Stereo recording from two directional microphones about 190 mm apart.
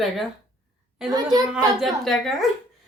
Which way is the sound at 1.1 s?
20° right (ahead or behind).